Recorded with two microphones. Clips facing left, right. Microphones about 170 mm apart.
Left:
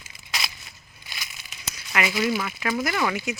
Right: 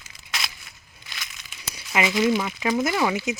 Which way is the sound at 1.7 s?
20° right (ahead or behind).